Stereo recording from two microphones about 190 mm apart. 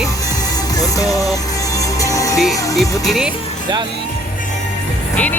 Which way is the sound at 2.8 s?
15° left (ahead or behind).